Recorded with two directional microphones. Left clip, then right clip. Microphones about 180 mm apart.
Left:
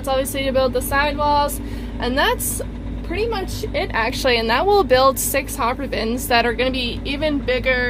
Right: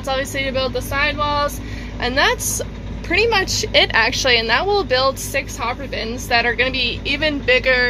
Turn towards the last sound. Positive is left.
turn(degrees=10)  # may be behind; listen again after turning